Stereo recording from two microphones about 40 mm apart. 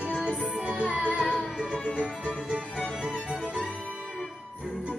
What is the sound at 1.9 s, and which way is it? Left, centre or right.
Music, left.